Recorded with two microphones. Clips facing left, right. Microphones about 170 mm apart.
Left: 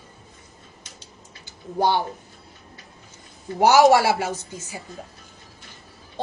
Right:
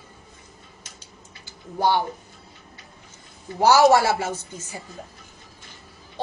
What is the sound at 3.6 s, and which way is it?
Speech, 15° left (ahead or behind).